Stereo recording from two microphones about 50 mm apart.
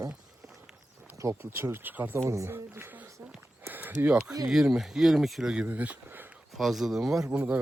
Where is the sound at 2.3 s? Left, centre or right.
Right.